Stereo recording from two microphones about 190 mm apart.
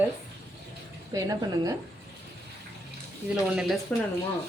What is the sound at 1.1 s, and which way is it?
Speech, 20° right (ahead or behind).